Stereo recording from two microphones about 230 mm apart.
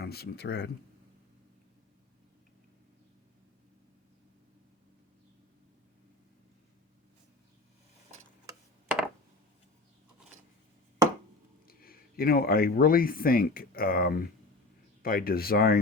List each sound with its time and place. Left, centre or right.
0.0 s speech: left
8.4 s a sound: centre
11.7 s speech: left